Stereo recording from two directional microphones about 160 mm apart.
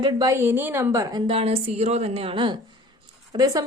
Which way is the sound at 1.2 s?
35° right (ahead or behind).